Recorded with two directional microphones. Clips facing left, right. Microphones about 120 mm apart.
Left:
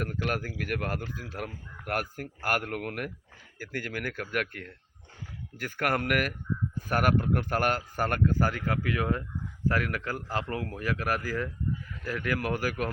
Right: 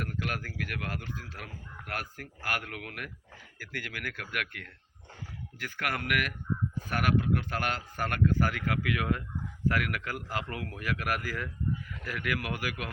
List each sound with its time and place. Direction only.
0.2 s speech: 30° left (ahead or behind)
0.7 s a man's voice: 45° left (ahead or behind)